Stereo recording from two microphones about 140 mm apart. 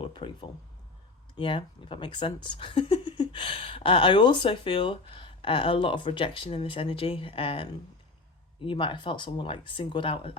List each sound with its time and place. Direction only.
0.0 s speech: 35° left (ahead or behind)